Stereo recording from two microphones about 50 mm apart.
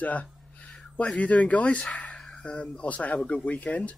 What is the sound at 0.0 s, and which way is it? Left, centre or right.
Speech, left.